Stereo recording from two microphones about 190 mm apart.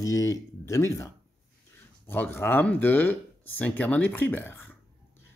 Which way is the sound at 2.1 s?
10° left (ahead or behind).